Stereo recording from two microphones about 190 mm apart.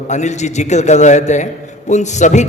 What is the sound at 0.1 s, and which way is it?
A man's voice, 40° left (ahead or behind).